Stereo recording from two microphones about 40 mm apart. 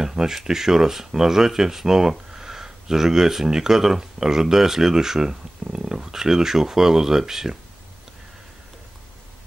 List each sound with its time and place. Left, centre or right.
0.0 s speech: centre